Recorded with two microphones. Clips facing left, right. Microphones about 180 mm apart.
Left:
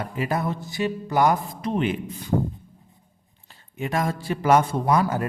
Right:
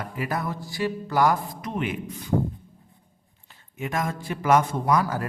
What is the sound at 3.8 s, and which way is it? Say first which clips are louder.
A man's voice: left 3 dB; 30° left (ahead or behind).